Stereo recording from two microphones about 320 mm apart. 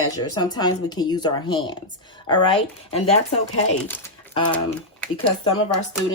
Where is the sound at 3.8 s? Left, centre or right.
Centre.